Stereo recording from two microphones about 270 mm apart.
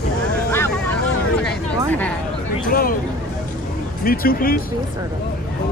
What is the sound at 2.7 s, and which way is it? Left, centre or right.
Speech, left.